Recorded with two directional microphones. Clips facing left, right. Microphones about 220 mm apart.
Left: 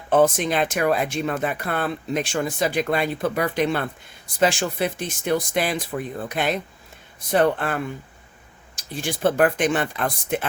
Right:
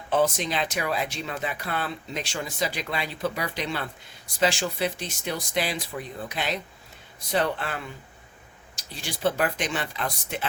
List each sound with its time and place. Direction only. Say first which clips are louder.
0.1 s speech: left 6 dB; 50° left (ahead or behind)